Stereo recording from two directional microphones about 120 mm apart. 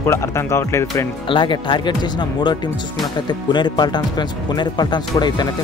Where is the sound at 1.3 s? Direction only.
40° left (ahead or behind).